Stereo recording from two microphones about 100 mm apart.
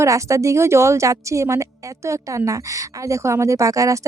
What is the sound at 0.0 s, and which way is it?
A woman's voice, 30° right (ahead or behind).